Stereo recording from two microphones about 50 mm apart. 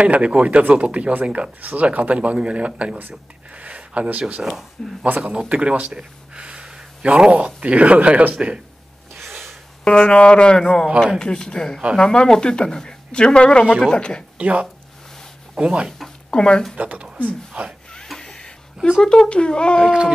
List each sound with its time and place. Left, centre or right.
0.0 s speech: right
5.0 s speech: right
5.3 s speech: right
9.1 s snort: centre
9.8 s speech: centre
14.4 s speech: right
16.3 s speech: centre
16.7 s speech: right
18.0 s a sound: centre
18.9 s speech: centre